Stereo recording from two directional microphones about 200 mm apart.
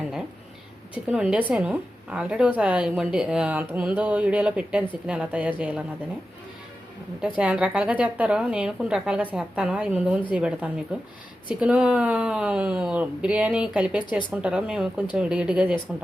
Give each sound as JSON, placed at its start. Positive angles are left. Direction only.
{"t": 1.0, "sound": "a woman's voice", "side_deg": -5}
{"t": 7.2, "sound": "a woman's voice", "side_deg": -5}